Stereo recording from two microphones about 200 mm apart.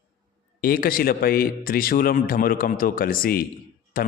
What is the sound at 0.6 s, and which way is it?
A man's voice, 45° left (ahead or behind).